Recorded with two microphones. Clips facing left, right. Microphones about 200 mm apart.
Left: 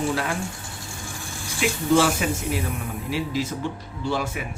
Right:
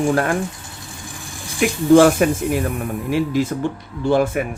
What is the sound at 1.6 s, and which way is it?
Speech, 55° right (ahead or behind).